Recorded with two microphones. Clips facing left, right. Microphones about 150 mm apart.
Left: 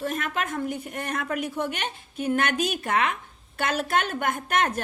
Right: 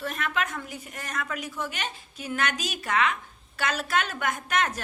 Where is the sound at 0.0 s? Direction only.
45° left (ahead or behind).